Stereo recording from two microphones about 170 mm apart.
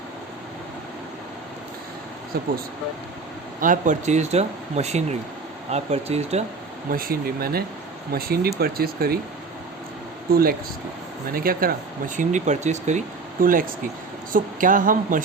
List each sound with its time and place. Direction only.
2.3 s speech: 65° right (ahead or behind)
3.6 s speech: 50° right (ahead or behind)
6.9 s speech: 60° right (ahead or behind)
11.3 s speech: 60° right (ahead or behind)
13.4 s speech: 55° right (ahead or behind)